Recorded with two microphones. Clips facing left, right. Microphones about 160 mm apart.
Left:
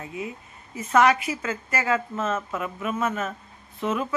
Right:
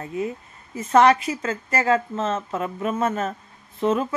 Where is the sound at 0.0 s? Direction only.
40° right (ahead or behind).